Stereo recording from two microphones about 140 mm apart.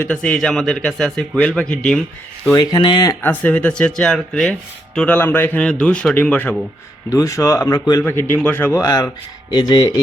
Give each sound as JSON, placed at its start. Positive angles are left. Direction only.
{"t": 0.0, "sound": "speech", "side_deg": 10}
{"t": 2.6, "sound": "speech", "side_deg": 30}
{"t": 3.2, "sound": "a man's voice", "side_deg": 15}
{"t": 7.1, "sound": "speech", "side_deg": 20}
{"t": 8.0, "sound": "a man's voice", "side_deg": 15}
{"t": 8.8, "sound": "speech", "side_deg": 25}